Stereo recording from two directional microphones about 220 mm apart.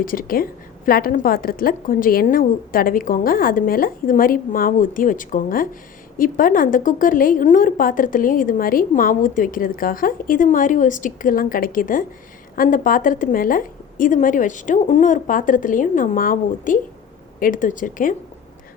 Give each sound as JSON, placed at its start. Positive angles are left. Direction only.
{"t": 0.0, "sound": "a woman's voice", "side_deg": 40}